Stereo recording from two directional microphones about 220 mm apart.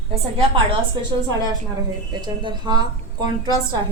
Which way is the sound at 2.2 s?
20° right (ahead or behind).